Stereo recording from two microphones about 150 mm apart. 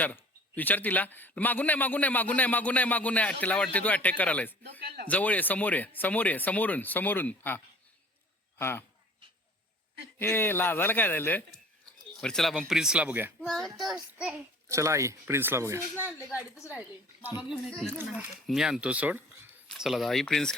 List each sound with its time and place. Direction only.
0.0 s a man's voice: 10° left (ahead or behind)
10.2 s a man's voice: 15° left (ahead or behind); by 13.3 s 10° right (ahead or behind)
13.4 s speech: 5° left (ahead or behind)
14.7 s speech: 20° right (ahead or behind)
16.0 s a woman's voice: 20° left (ahead or behind)
18.4 s speech: 5° right (ahead or behind)